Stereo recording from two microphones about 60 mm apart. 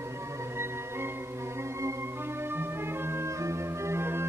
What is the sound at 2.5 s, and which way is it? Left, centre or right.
Organ, right.